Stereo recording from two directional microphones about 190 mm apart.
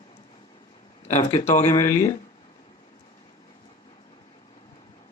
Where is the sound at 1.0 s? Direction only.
40° left (ahead or behind).